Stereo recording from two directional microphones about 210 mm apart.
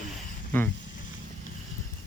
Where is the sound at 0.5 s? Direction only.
10° left (ahead or behind).